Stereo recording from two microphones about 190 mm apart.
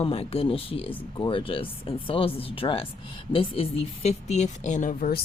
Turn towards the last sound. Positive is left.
turn(degrees=45)  # may be behind; listen again after turning